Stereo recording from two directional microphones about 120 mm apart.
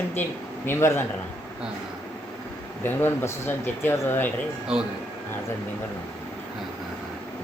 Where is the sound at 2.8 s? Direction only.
20° left (ahead or behind).